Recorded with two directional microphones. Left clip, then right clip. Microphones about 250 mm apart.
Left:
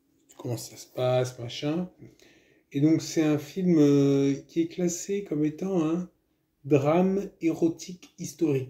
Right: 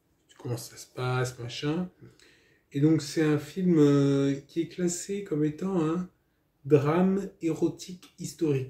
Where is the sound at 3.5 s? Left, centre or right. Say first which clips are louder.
Left 1 dB; centre.